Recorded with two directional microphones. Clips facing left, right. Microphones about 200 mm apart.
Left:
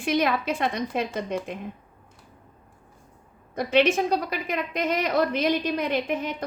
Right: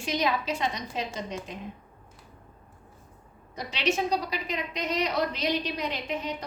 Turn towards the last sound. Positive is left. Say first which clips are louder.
# left 6 dB
turn(degrees=55)  # may be behind; listen again after turning